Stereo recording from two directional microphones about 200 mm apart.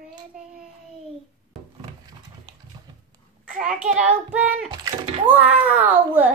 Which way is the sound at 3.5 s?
35° right (ahead or behind).